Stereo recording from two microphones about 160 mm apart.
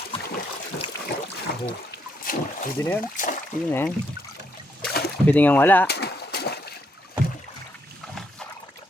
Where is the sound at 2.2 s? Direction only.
60° left (ahead or behind).